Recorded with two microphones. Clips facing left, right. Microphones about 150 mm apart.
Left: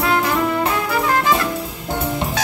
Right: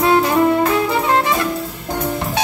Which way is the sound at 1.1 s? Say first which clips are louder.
Left 1 dB; 25° right (ahead or behind).